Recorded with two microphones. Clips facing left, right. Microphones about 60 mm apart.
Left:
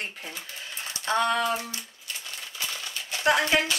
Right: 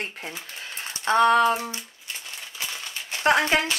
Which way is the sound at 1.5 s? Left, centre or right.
Right.